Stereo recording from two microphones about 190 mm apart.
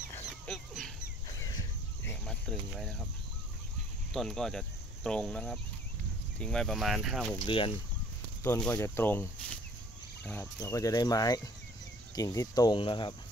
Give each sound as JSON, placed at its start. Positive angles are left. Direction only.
{"t": 0.1, "sound": "dog", "side_deg": 0}
{"t": 2.0, "sound": "cricket", "side_deg": 0}
{"t": 4.1, "sound": "speech", "side_deg": 0}
{"t": 7.3, "sound": "speech", "side_deg": 25}
{"t": 8.5, "sound": "speech", "side_deg": 10}